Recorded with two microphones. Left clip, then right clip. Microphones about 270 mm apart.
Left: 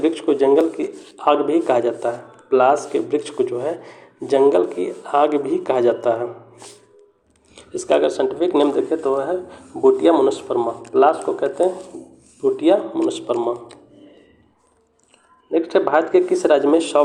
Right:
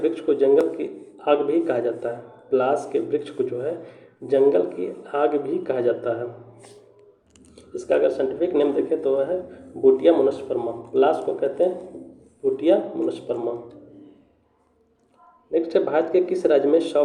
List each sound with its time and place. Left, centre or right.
0.0 s a man's voice: centre
15.7 s speech: centre